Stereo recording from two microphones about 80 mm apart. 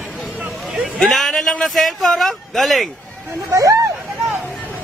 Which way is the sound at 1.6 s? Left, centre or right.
Centre.